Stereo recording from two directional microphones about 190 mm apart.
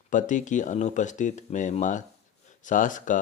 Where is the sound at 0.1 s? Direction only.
40° left (ahead or behind).